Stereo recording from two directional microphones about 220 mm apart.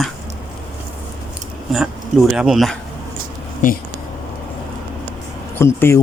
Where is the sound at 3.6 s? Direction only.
35° left (ahead or behind).